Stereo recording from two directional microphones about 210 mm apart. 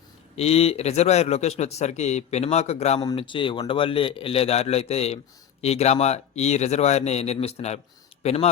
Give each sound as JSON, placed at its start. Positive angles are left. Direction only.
{"t": 0.3, "sound": "a man's voice", "side_deg": 30}